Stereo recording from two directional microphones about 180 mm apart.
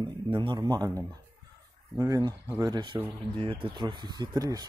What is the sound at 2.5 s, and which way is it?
A man's voice, 25° right (ahead or behind).